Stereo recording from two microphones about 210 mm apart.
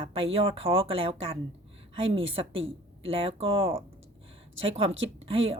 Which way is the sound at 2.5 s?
65° right (ahead or behind).